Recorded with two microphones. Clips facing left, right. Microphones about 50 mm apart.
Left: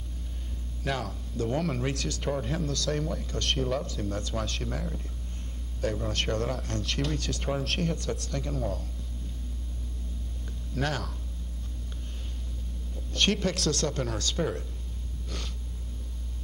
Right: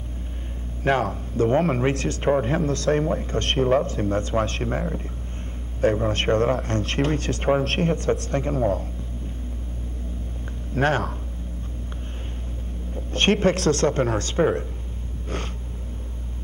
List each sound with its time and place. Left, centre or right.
0.8 s speech: right
10.7 s speech: right
12.9 s speech: right
15.2 s snort: right